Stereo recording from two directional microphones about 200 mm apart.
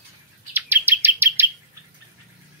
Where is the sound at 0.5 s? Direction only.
10° right (ahead or behind).